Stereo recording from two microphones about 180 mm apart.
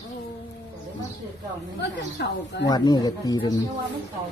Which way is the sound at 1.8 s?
70° left (ahead or behind).